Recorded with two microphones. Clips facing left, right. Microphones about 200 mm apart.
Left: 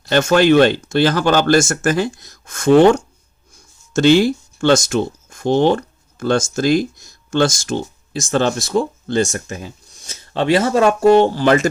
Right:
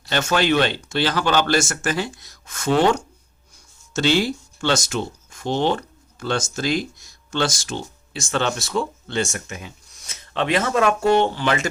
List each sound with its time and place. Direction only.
0.0 s speech: 45° left (ahead or behind)